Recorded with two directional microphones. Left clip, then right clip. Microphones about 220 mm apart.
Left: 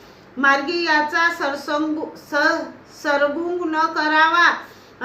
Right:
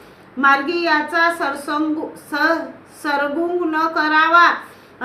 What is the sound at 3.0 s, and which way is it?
Speech, 15° right (ahead or behind).